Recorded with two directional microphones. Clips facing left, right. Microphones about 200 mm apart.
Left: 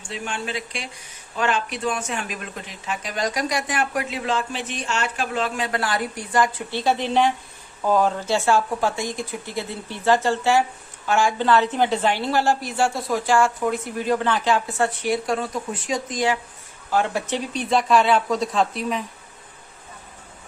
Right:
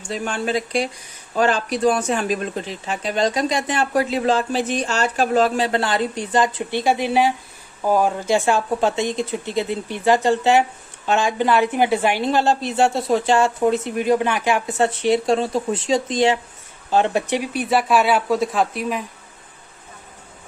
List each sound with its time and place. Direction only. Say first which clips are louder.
0.1 s a woman's voice: right 7 dB; 40° right (ahead or behind); by 19.0 s 5° right (ahead or behind)